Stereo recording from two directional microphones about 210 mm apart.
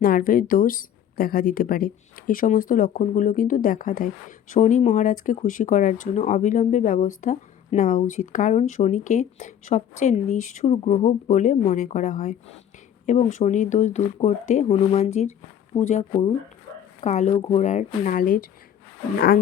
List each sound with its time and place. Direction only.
0.0 s speech: 40° left (ahead or behind)
17.0 s speech: 35° left (ahead or behind)